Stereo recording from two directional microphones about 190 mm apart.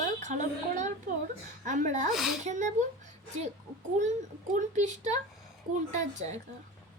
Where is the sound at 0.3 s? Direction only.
40° right (ahead or behind).